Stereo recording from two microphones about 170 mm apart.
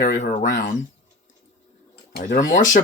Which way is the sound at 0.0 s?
50° left (ahead or behind).